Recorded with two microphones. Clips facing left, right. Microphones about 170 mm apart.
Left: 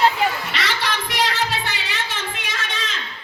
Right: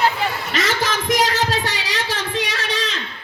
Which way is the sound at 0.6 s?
45° right (ahead or behind).